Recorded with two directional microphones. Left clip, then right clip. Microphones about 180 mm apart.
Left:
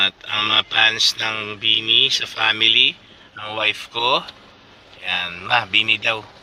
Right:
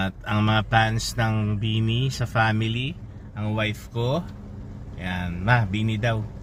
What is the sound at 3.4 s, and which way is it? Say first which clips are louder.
Speech: left 7 dB; 20° left (ahead or behind).